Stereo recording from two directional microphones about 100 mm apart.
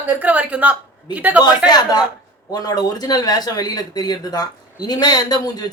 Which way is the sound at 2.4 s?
40° left (ahead or behind).